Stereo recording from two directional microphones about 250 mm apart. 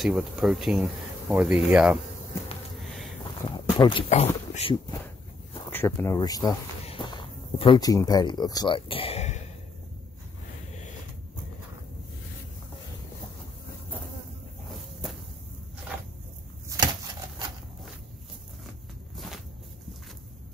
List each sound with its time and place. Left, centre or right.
0.0 s speech: centre
3.4 s speech: centre
5.7 s speech: centre; by 9.4 s left
16.6 s a sound: centre